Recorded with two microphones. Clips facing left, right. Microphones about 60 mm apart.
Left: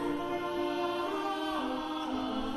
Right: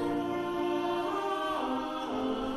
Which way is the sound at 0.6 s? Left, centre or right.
Centre.